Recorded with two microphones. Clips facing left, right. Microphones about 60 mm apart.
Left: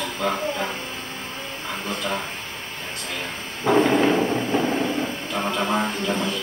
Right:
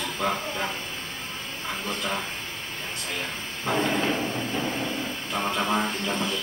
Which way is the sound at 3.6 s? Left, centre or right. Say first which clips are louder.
Left 7 dB; left.